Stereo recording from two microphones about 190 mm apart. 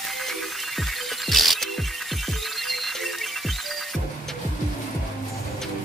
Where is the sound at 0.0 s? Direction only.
Centre (ahead or behind).